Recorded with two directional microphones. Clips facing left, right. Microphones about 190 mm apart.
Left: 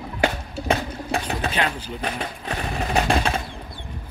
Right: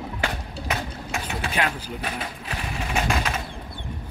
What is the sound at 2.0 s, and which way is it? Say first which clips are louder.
Sewing machine: left 6 dB; 35° left (ahead or behind).